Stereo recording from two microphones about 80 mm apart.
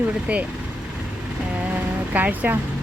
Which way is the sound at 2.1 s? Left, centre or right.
Right.